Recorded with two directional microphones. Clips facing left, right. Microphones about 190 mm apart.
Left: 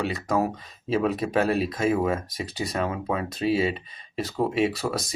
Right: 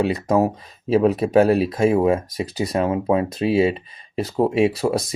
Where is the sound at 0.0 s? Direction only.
35° right (ahead or behind).